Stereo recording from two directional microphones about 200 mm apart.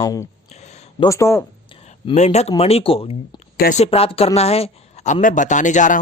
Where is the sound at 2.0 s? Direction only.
35° left (ahead or behind).